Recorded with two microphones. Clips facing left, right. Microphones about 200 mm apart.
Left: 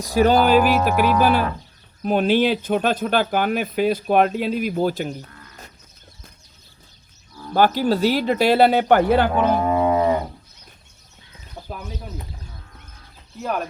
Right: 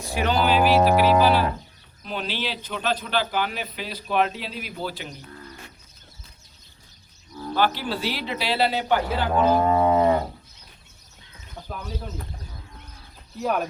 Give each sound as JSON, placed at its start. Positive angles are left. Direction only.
{"t": 0.0, "sound": "speech", "side_deg": 40}
{"t": 7.5, "sound": "speech", "side_deg": 45}
{"t": 9.7, "sound": "livestock", "side_deg": 10}
{"t": 13.4, "sound": "speech", "side_deg": 0}